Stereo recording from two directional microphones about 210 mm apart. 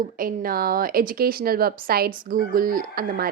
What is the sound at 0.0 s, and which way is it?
A woman's voice, 40° right (ahead or behind).